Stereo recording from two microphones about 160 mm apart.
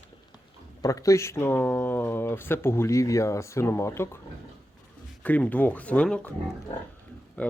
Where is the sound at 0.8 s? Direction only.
20° left (ahead or behind).